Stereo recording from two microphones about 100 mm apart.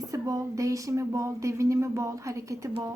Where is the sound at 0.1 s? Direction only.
35° right (ahead or behind).